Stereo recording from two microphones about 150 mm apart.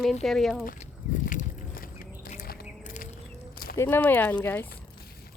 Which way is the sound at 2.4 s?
80° left.